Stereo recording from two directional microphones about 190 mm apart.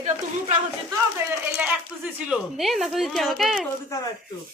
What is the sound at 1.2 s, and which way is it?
Speech, 15° right (ahead or behind).